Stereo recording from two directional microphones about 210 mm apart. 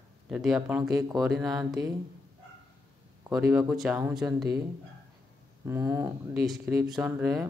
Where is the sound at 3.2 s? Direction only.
5° right (ahead or behind).